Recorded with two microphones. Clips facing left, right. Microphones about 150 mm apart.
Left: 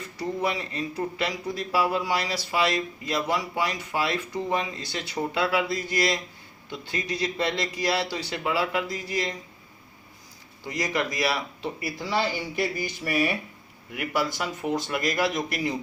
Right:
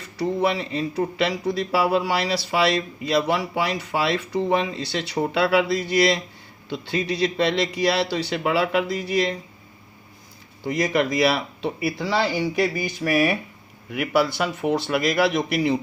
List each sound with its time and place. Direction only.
0.2 s a man's voice: 70° right (ahead or behind)
10.7 s speech: 60° right (ahead or behind); by 13.3 s 80° right
13.9 s speech: 70° right (ahead or behind)